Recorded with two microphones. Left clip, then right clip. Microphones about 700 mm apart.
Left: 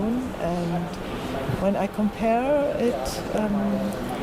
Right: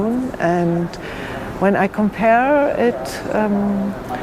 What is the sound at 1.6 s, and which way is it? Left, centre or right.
Speech, right.